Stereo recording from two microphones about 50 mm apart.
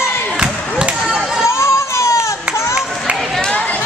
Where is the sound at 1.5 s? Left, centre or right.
Left.